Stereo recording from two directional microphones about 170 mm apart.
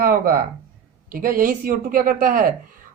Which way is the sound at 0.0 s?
55° right (ahead or behind).